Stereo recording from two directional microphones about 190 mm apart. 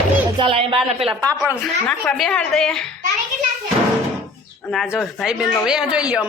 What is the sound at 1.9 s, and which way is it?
Speech, 5° left (ahead or behind).